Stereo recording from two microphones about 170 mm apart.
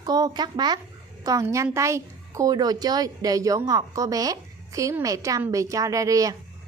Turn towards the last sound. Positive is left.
turn(degrees=-20)  # may be behind; listen again after turning